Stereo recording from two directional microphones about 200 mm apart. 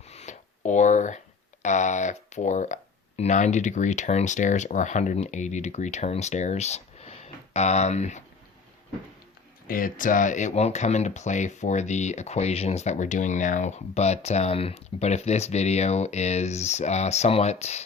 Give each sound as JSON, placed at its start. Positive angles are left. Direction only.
{"t": 0.0, "sound": "a sound", "side_deg": 35}
{"t": 3.2, "sound": "speech", "side_deg": 35}
{"t": 9.6, "sound": "speech", "side_deg": 45}